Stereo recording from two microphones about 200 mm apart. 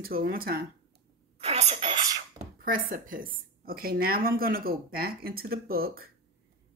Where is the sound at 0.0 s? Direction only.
45° right (ahead or behind).